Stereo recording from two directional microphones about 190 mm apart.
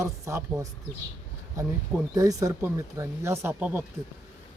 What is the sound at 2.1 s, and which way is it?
Speech, 15° right (ahead or behind).